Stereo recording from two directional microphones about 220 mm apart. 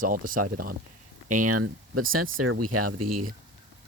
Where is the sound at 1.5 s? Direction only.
90° right.